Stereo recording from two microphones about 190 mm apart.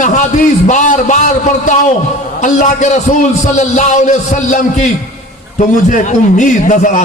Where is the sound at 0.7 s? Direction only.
40° left (ahead or behind).